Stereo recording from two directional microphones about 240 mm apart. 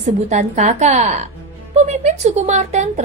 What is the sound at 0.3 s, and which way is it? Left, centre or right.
A woman's voice, right.